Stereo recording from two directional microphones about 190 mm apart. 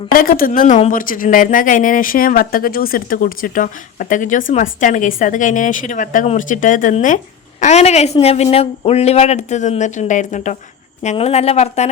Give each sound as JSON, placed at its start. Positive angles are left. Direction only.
{"t": 0.1, "sound": "speech", "side_deg": 50}